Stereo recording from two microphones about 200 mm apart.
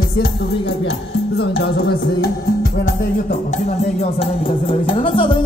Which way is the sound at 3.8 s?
30° left (ahead or behind).